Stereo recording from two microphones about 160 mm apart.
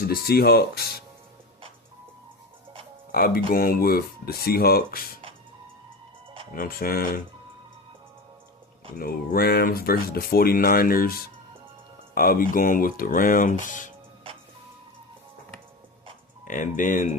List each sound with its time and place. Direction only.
0.1 s speech: 75° left (ahead or behind)
3.1 s speech: 65° left (ahead or behind)
6.5 s speech: 65° left (ahead or behind)
9.0 s speech: 70° left (ahead or behind); by 13.8 s 55° left (ahead or behind)
16.5 s speech: 55° left (ahead or behind)